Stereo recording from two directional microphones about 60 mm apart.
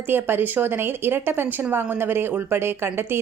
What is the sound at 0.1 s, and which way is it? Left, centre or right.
Speech, right.